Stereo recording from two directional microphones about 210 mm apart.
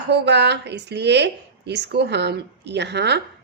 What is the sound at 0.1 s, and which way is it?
A woman's voice, 55° right (ahead or behind).